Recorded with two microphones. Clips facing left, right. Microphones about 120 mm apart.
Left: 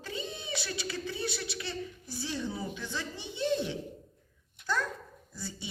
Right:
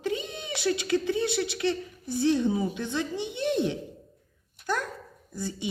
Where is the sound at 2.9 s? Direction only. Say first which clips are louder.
Right 9 dB; 20° right (ahead or behind).